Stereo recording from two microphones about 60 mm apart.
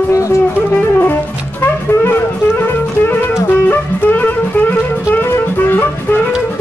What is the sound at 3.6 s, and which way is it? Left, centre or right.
Music, left.